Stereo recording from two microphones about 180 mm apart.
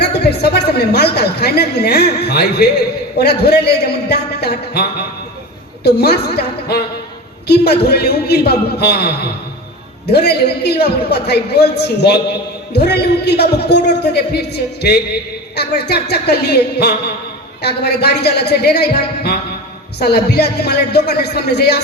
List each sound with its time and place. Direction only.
0.0 s a woman's voice: 65° left (ahead or behind)